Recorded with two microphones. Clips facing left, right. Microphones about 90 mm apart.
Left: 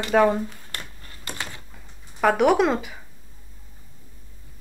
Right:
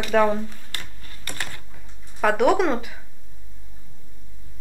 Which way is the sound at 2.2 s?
Centre (ahead or behind).